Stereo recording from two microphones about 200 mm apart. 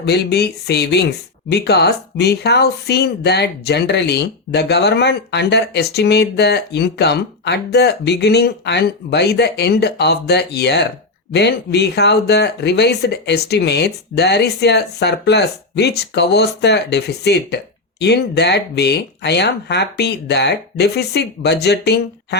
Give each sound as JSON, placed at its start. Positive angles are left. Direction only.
{"t": 0.0, "sound": "speech", "side_deg": 55}